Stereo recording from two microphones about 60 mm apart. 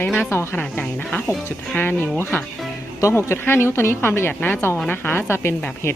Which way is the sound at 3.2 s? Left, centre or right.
Left.